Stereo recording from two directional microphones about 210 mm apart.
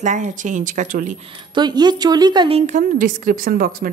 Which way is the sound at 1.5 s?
20° right (ahead or behind).